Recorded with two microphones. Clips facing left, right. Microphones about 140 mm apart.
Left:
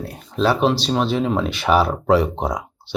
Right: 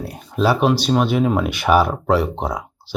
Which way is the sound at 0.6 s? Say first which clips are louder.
Right 2 dB; 5° right (ahead or behind).